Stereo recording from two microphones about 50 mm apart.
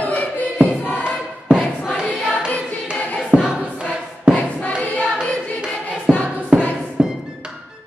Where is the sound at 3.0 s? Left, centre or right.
Left.